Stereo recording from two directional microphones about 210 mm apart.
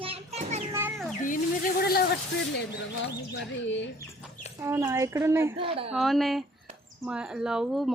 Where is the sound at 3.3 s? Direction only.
60° left (ahead or behind).